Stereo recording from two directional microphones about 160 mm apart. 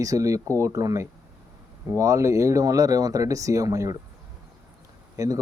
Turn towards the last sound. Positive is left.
turn(degrees=-20)  # may be behind; listen again after turning